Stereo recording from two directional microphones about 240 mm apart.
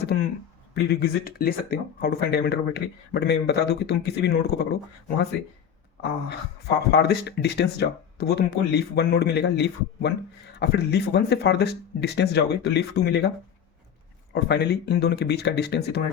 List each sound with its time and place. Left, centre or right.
0.7 s speech: left
6.2 s speech: left
14.3 s speech: left